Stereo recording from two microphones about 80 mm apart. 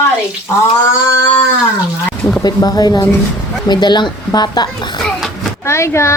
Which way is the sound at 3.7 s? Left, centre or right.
Left.